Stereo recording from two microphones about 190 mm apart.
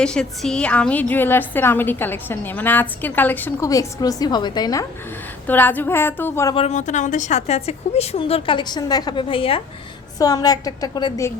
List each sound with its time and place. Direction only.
0.0 s a woman's voice: 5° left (ahead or behind)
6.5 s a woman's voice: 35° left (ahead or behind)